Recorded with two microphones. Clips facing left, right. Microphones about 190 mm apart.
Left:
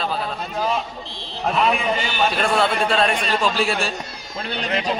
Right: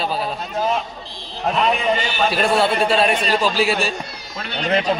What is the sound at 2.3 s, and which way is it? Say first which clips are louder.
A man's voice: right 5 dB; 5° right (ahead or behind).